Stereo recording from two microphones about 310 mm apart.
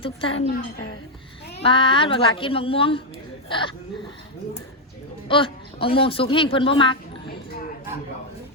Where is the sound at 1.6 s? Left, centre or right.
Centre.